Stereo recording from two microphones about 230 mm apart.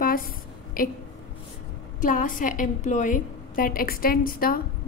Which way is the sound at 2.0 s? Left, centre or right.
Left.